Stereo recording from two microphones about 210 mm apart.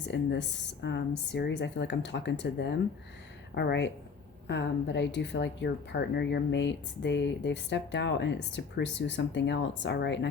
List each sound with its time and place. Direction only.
0.0 s speech: 55° left (ahead or behind)